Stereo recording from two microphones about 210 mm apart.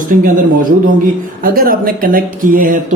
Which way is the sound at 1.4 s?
45° right (ahead or behind).